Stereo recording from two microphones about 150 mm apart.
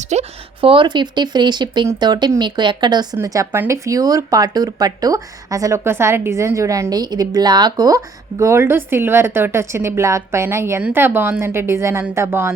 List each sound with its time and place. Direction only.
0.1 s a woman's voice: 40° right (ahead or behind); by 12.5 s 15° right (ahead or behind)